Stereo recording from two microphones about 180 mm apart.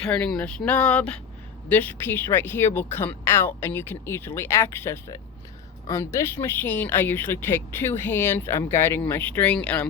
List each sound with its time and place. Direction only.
0.0 s a woman's voice: 5° left (ahead or behind)